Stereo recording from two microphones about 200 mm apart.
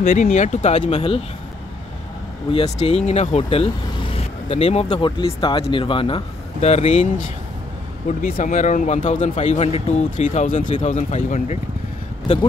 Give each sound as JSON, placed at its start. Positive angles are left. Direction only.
{"t": 0.0, "sound": "a man's voice", "side_deg": 35}
{"t": 2.5, "sound": "a man's voice", "side_deg": 30}
{"t": 8.2, "sound": "a man's voice", "side_deg": 45}